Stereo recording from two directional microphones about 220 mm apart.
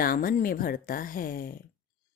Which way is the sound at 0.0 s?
40° left (ahead or behind).